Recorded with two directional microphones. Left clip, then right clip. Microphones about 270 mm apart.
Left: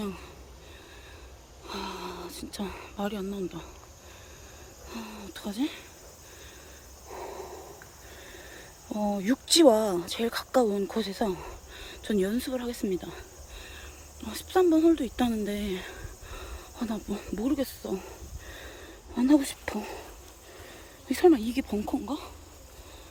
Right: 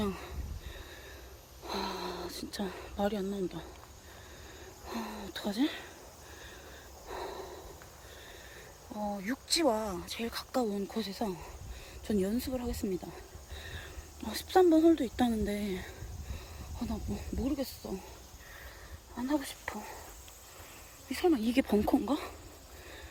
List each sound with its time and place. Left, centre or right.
0.0 s speech: centre
1.6 s a sound: centre
4.9 s speech: centre
7.1 s gasp: centre
8.9 s speech: left
9.1 s speech: left; by 18.0 s centre
19.1 s speech: left
21.1 s speech: centre
21.3 s speech: centre